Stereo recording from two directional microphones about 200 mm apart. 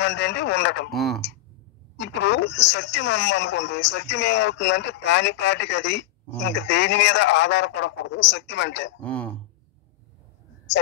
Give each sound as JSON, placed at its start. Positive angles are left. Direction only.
{"t": 0.0, "sound": "a woman's voice", "side_deg": 60}
{"t": 0.8, "sound": "speech", "side_deg": 0}
{"t": 2.0, "sound": "a woman's voice", "side_deg": 60}
{"t": 9.0, "sound": "speech", "side_deg": 5}